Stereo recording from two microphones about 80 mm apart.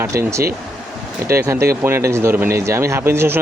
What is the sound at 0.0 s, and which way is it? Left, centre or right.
Speech, right.